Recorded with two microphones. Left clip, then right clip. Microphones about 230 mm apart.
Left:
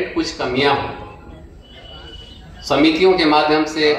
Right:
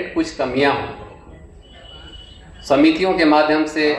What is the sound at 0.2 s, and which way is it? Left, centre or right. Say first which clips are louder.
Speech: right 2 dB; right.